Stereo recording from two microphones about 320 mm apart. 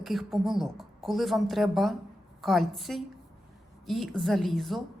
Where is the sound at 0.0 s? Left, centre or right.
Centre.